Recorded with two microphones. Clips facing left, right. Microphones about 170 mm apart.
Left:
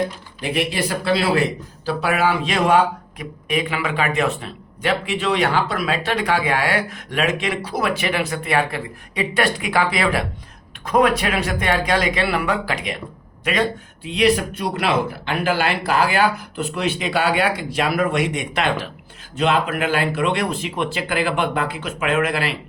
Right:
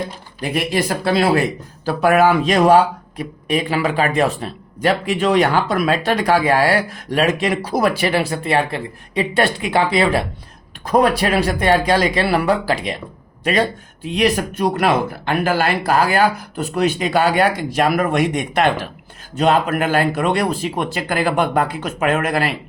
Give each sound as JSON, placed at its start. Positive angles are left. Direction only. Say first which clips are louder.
{"t": 0.3, "sound": "speech", "louder": "right 3 dB", "side_deg": -45}